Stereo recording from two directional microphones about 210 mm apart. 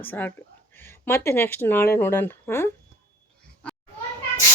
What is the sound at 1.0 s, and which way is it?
Speech, 10° left (ahead or behind).